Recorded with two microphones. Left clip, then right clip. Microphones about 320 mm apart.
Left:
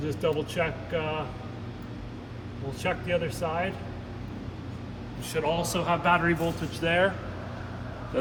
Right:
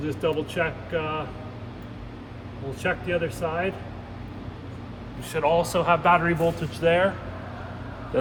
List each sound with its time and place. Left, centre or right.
0.0 s speech: centre
2.8 s speech: centre
5.3 s speech: centre; by 7.1 s right